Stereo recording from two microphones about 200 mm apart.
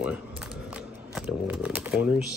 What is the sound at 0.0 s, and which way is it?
Shuffling cards, 5° right (ahead or behind).